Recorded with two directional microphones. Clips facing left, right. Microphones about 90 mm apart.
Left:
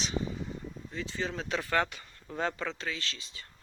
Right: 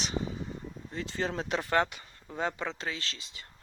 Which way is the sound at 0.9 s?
35° right (ahead or behind).